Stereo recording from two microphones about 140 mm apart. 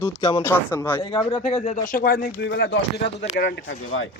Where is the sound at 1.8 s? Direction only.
85° left.